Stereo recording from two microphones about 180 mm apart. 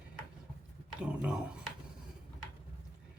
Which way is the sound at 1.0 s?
5° right (ahead or behind).